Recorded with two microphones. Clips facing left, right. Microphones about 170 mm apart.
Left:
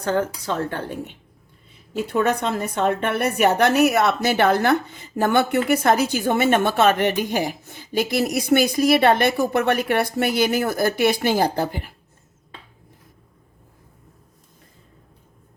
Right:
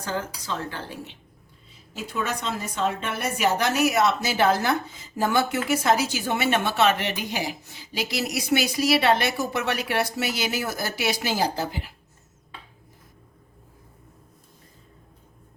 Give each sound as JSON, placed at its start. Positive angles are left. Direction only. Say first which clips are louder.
{"t": 0.0, "sound": "a woman's voice", "louder": "left 8 dB", "side_deg": 60}